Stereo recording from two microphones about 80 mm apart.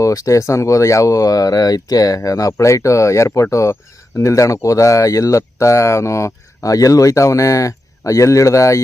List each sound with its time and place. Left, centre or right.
0.0 s speech: left